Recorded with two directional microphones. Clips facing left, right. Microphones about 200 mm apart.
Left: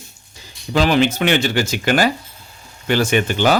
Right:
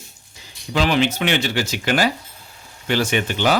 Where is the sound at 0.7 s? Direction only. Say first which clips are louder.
Left 3 dB; 45° left (ahead or behind).